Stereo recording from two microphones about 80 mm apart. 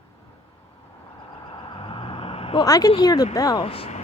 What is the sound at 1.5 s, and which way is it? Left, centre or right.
Vehicle, left.